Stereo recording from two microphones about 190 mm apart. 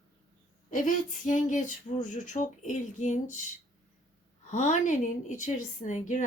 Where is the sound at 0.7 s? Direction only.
40° left (ahead or behind).